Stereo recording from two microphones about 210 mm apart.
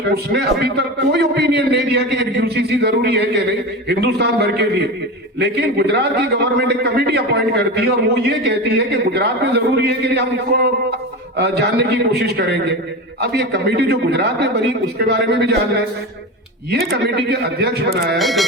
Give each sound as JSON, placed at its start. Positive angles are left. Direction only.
{"t": 0.1, "sound": "a man's voice", "side_deg": -50}
{"t": 18.2, "sound": "music", "side_deg": 0}